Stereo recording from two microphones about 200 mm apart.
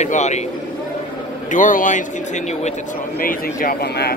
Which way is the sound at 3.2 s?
45° left (ahead or behind).